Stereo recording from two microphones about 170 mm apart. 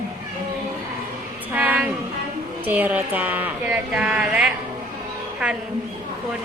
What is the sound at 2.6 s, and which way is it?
Speech, 10° right (ahead or behind).